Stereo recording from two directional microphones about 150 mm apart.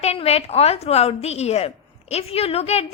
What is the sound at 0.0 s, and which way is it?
A woman's voice, 45° left (ahead or behind).